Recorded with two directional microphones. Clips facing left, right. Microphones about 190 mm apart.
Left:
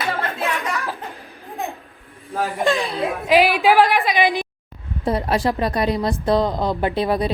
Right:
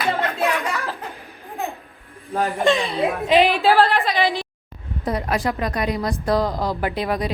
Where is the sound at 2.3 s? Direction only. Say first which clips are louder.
Right 1 dB; centre (ahead or behind); by 4.5 s 15° left (ahead or behind).